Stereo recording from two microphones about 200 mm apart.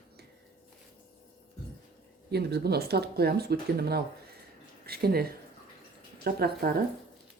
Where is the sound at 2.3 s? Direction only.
55° right (ahead or behind).